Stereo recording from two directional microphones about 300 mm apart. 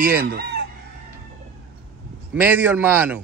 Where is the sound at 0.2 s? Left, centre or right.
Right.